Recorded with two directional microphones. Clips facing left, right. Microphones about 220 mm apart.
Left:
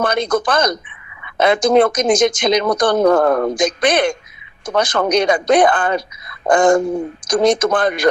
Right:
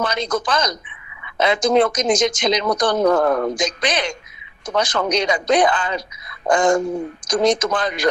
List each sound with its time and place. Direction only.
0.0 s speech: 55° left (ahead or behind)